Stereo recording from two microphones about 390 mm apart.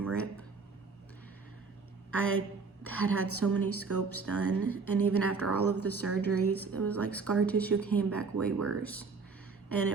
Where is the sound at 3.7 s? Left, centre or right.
Right.